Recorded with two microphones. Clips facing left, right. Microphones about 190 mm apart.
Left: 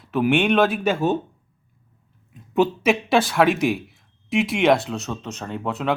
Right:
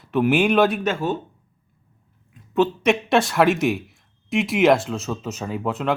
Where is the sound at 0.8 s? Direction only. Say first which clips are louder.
Left 3 dB; 15° left (ahead or behind).